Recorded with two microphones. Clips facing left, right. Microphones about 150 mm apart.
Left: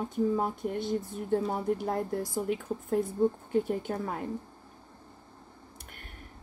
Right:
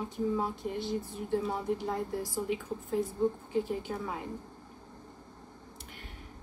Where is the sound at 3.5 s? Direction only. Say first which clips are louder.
Left 3 dB; 55° left (ahead or behind).